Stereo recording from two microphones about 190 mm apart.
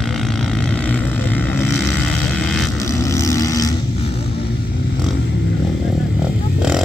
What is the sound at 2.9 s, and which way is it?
Vehicle, 15° left (ahead or behind).